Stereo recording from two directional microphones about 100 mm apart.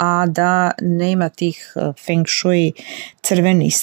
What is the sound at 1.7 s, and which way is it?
Speech, 20° right (ahead or behind).